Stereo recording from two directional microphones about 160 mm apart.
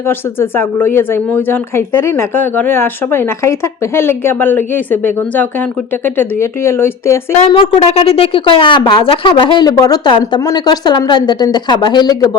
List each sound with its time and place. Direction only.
0.1 s a woman's voice: 15° left (ahead or behind)
7.3 s a woman's voice: 35° left (ahead or behind)